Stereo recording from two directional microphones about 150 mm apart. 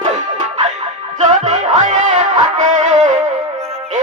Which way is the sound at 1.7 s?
55° right (ahead or behind).